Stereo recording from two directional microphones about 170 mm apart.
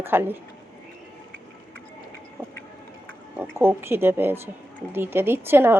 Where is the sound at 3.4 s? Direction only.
15° right (ahead or behind).